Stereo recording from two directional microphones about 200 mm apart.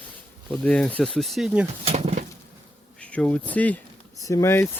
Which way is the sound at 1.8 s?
30° right (ahead or behind).